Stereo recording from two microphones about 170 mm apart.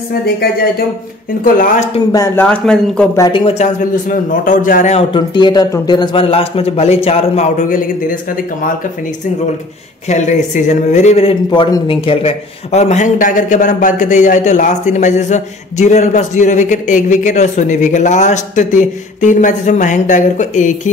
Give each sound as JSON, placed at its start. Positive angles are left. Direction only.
{"t": 1.4, "sound": "a man's voice", "side_deg": 50}
{"t": 2.1, "sound": "a man's voice", "side_deg": 15}
{"t": 3.2, "sound": "speech", "side_deg": 25}
{"t": 3.5, "sound": "a man's voice", "side_deg": 45}
{"t": 5.1, "sound": "a man's voice", "side_deg": 25}
{"t": 10.0, "sound": "a man's voice", "side_deg": 45}